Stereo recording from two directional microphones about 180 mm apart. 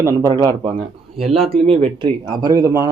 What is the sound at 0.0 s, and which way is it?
A man's voice, 15° right (ahead or behind).